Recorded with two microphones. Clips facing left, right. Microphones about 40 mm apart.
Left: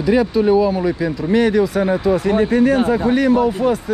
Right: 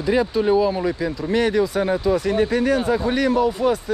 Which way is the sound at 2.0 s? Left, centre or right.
Left.